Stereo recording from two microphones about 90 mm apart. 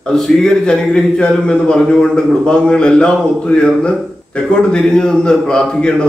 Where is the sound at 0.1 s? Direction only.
5° left (ahead or behind).